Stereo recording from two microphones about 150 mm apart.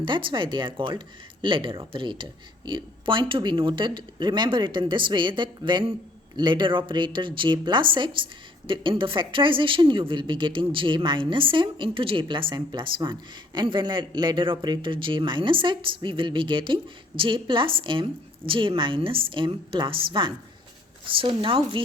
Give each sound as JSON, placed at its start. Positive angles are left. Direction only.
{"t": 0.0, "sound": "a woman's voice", "side_deg": -35}